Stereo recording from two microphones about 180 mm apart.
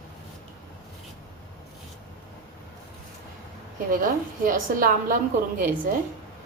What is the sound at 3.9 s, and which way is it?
A woman's voice, 50° right (ahead or behind).